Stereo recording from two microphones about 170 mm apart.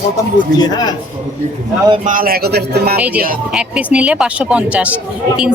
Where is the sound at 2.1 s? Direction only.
60° right (ahead or behind).